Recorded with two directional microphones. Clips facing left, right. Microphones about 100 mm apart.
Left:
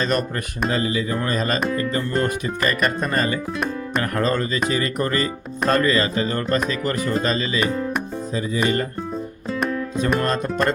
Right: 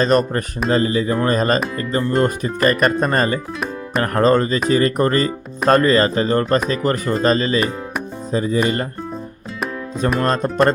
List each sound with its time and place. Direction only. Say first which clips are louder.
0.0 s speech: right 6 dB; 40° right (ahead or behind)
10.2 s speech: right 4 dB; 40° right (ahead or behind)